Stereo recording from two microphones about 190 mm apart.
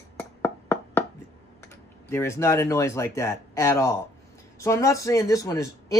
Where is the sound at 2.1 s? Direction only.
15° left (ahead or behind).